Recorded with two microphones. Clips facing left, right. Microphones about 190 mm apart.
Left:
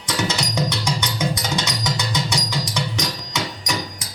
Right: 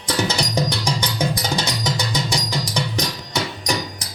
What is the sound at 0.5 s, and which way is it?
Music, 35° right (ahead or behind).